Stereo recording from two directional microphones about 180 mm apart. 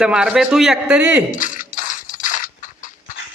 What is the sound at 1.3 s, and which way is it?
Music, 45° left (ahead or behind).